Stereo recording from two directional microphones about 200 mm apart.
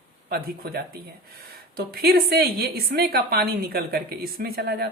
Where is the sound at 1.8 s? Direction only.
50° right (ahead or behind).